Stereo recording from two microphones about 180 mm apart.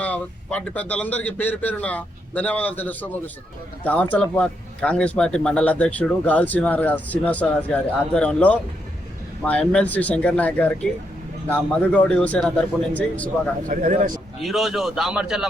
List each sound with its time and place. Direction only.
0.0 s a man's voice: 10° left (ahead or behind)
13.7 s speech: 45° right (ahead or behind)
14.4 s a man's voice: centre (ahead or behind)